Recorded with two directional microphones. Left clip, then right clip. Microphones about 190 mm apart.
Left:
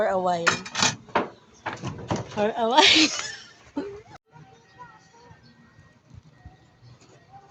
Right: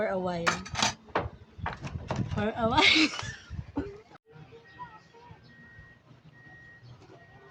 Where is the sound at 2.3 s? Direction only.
40° right (ahead or behind).